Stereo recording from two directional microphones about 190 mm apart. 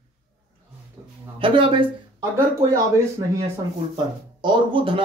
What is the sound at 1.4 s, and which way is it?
Speech, 25° right (ahead or behind).